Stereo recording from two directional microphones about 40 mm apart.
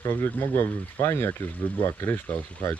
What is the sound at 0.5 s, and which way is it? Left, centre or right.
Speech, left.